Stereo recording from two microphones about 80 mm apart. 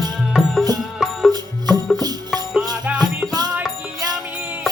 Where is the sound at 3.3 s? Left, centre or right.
Right.